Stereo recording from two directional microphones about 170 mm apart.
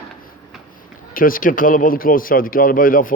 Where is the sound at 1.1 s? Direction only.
55° left (ahead or behind).